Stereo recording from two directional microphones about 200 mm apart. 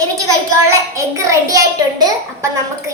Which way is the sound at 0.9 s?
15° right (ahead or behind).